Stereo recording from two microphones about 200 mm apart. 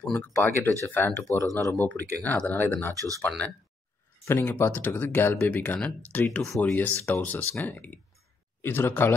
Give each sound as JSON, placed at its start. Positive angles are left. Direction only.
{"t": 0.0, "sound": "speech", "side_deg": 5}
{"t": 2.9, "sound": "speech", "side_deg": -15}
{"t": 3.2, "sound": "speech", "side_deg": 5}